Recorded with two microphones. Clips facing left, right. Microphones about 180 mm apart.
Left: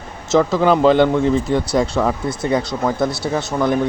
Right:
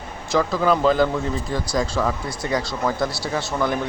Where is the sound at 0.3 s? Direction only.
25° left (ahead or behind).